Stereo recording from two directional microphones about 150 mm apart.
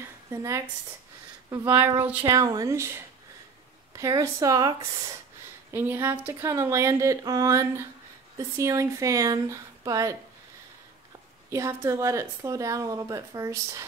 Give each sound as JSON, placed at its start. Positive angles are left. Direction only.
{"t": 0.0, "sound": "a sound", "side_deg": -20}
{"t": 1.5, "sound": "speech", "side_deg": -15}
{"t": 2.2, "sound": "a woman's voice", "side_deg": -25}
{"t": 3.9, "sound": "a woman's voice", "side_deg": -20}
{"t": 11.5, "sound": "a woman's voice", "side_deg": -20}